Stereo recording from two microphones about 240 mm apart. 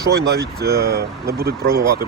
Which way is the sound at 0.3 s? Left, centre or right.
Right.